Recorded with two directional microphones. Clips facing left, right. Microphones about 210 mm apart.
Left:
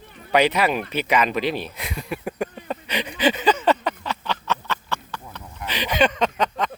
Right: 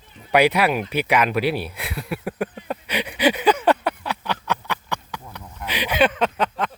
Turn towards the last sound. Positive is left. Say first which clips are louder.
# even
turn(degrees=-5)  # may be behind; listen again after turning